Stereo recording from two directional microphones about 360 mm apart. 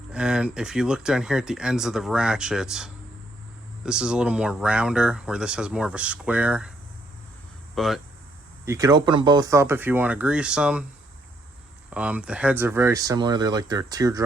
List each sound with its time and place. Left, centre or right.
0.1 s speech: centre
7.8 s speech: centre
11.9 s speech: centre